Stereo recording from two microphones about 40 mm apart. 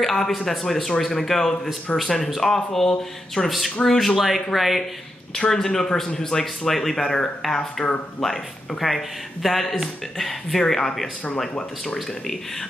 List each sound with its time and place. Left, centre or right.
0.0 s a man's voice: centre
1.9 s speech: left
2.2 s speech: centre
2.5 s a man's voice: centre
3.4 s a man's voice: centre
5.3 s a man's voice: centre
7.4 s a man's voice: centre